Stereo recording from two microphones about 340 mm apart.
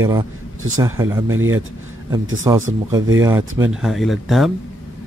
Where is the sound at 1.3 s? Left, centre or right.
Right.